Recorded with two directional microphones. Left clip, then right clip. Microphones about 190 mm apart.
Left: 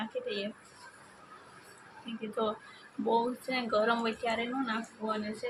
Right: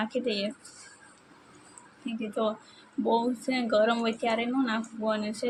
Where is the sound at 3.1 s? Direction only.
15° right (ahead or behind).